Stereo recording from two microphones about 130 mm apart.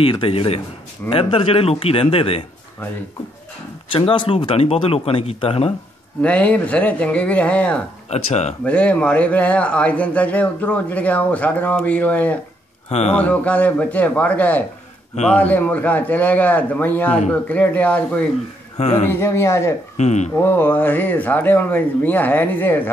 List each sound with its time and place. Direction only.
0.0 s speech: 45° left (ahead or behind)
3.9 s speech: 40° left (ahead or behind)
6.2 s a man's voice: 10° left (ahead or behind)
8.1 s speech: 55° left (ahead or behind)
8.6 s a man's voice: 10° left (ahead or behind)
12.9 s speech: 55° left (ahead or behind)
13.2 s a man's voice: 10° left (ahead or behind)
18.8 s speech: 55° left (ahead or behind)
19.0 s a man's voice: 20° left (ahead or behind)
20.0 s speech: 60° left (ahead or behind)
20.4 s a man's voice: 15° left (ahead or behind)